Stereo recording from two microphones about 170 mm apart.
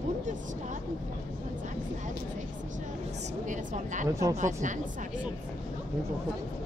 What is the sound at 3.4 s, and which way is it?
A woman's voice, 45° right (ahead or behind).